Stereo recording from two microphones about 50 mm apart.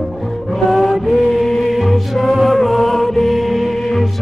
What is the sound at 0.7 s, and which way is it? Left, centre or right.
Music, centre.